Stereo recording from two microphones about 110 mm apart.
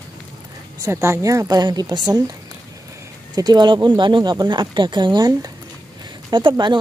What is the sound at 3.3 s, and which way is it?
Speech, 40° right (ahead or behind).